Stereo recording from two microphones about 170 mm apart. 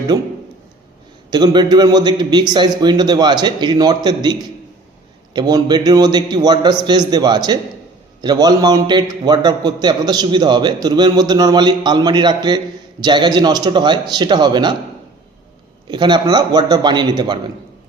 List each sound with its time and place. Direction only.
0.1 s a man's voice: 25° right (ahead or behind)
1.3 s a man's voice: 25° right (ahead or behind)
15.9 s a man's voice: 25° right (ahead or behind)